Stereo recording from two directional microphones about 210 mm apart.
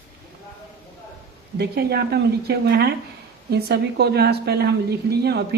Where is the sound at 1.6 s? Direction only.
50° right (ahead or behind).